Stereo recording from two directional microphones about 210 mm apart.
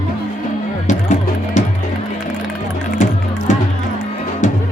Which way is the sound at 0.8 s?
35° left (ahead or behind).